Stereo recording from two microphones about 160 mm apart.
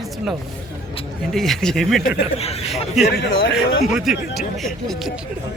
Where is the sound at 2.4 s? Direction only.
40° left (ahead or behind).